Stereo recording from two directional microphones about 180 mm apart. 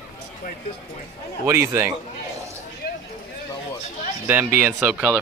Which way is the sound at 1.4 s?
15° right (ahead or behind).